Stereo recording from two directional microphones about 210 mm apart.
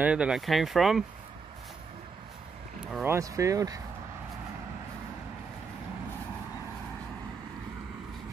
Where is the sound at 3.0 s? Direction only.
15° right (ahead or behind).